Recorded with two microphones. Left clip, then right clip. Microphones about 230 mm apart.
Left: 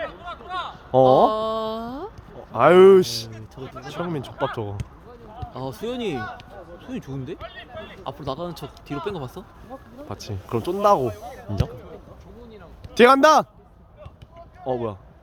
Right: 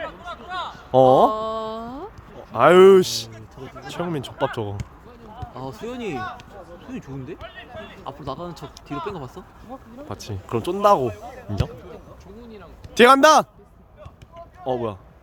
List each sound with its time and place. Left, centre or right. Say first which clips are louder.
0.3 s a sound: even; centre
1.3 s a sound: left 1 dB; left
2.5 s speech: right 1 dB; centre
5.5 s speech: left 3 dB; left
7.4 s a sound: even; left
8.0 s speech: left 2 dB; left
10.1 s speech: right 1 dB; centre
11.0 s speech: right 1 dB; left
12.9 s a man's voice: right 1 dB; centre
14.7 s speech: right 1 dB; centre